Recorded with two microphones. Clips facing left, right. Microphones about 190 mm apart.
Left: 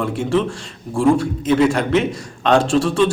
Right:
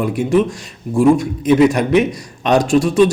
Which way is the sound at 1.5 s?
15° right (ahead or behind).